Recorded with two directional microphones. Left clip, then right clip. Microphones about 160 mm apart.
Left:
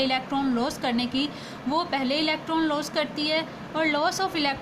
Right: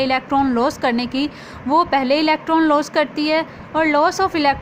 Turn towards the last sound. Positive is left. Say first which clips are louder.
# right 9 dB
turn(degrees=-50)  # may be behind; listen again after turning